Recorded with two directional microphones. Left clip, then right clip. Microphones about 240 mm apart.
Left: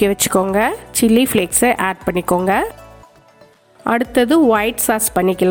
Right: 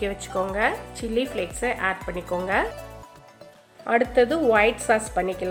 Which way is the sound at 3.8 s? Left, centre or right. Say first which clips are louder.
Left 4 dB; left.